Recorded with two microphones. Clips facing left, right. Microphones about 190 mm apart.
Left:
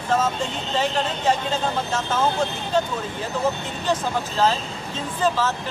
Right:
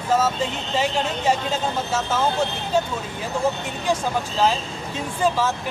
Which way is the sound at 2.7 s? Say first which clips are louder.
Even; 10° right (ahead or behind).